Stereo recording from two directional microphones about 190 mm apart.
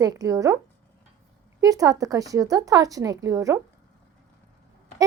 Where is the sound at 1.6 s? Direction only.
20° right (ahead or behind).